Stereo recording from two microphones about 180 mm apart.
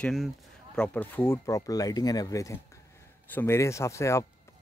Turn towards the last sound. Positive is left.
turn(degrees=15)  # may be behind; listen again after turning